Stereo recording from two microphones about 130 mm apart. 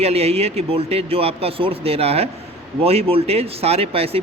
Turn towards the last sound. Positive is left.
turn(degrees=-50)  # may be behind; listen again after turning